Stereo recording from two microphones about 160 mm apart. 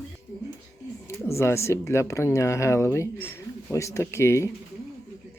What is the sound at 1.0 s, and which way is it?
Speech, 15° left (ahead or behind).